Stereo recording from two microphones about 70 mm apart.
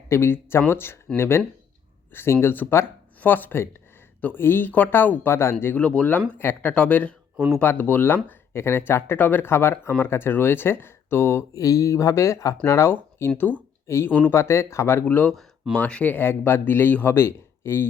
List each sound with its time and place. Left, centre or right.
0.1 s speech: left
5.7 s speech: centre
6.4 s speech: left
6.7 s speech: centre; by 11.4 s left
11.5 s speech: left
15.0 s speech: left